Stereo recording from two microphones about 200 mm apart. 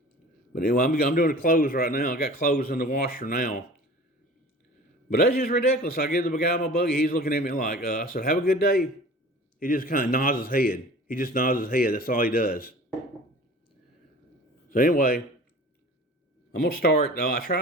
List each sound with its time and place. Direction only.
0.5 s a man's voice: 45° left (ahead or behind)
5.0 s a man's voice: 50° left (ahead or behind)
14.7 s a man's voice: 45° left (ahead or behind)
16.6 s a man's voice: 50° left (ahead or behind)